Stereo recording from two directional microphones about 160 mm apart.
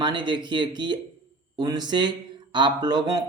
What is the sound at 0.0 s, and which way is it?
Speech, 30° right (ahead or behind).